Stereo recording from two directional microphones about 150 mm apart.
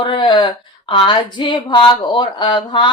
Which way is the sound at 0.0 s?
35° left (ahead or behind).